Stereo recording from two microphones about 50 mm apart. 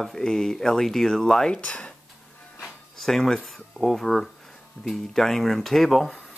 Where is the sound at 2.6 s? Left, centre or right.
Centre.